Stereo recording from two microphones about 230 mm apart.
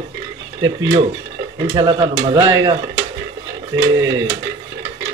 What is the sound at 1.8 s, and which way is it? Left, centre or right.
Speech, centre.